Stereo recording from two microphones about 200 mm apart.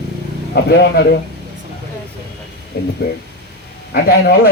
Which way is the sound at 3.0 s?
55° left (ahead or behind).